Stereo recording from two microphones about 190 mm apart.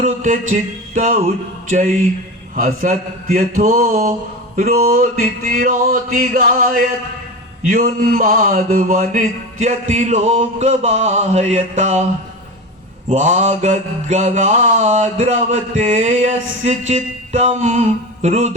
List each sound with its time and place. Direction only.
0.0 s mantra: 40° right (ahead or behind)
2.6 s mantra: 40° right (ahead or behind)
4.5 s a sound: 35° right (ahead or behind)
7.7 s mantra: 40° right (ahead or behind)
13.1 s mantra: 40° right (ahead or behind)